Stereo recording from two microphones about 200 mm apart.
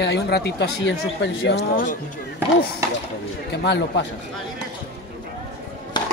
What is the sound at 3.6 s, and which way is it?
Speech, 60° left (ahead or behind).